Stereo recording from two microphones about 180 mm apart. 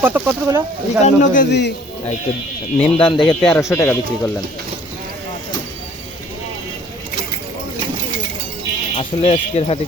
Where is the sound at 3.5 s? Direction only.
15° left (ahead or behind).